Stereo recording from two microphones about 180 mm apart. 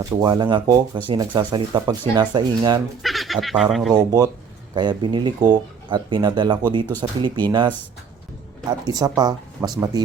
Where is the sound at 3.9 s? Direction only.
20° right (ahead or behind).